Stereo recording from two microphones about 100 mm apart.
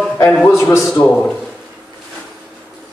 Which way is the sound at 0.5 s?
30° left (ahead or behind).